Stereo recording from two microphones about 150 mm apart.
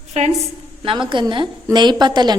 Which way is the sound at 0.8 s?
35° right (ahead or behind).